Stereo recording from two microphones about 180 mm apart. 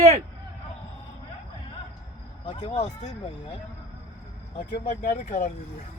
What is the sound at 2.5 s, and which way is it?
Speech, 35° left (ahead or behind).